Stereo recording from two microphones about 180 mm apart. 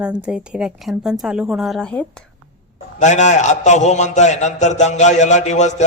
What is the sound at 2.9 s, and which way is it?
A man's voice, 40° left (ahead or behind).